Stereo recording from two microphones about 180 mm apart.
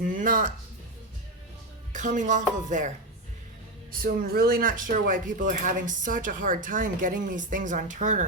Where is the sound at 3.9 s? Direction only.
50° right (ahead or behind).